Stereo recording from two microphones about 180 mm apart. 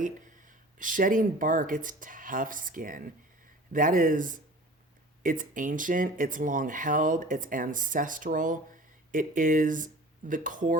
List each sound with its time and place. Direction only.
0.0 s speech: 45° right (ahead or behind)